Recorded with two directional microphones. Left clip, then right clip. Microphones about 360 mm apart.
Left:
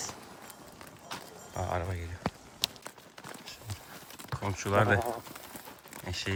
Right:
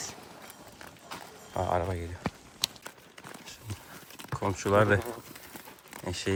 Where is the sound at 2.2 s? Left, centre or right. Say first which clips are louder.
Left 2 dB; centre.